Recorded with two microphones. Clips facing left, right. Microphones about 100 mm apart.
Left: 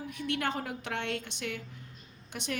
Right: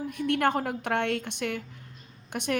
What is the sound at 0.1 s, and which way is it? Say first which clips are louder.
A woman's voice: right 8 dB; 50° right (ahead or behind).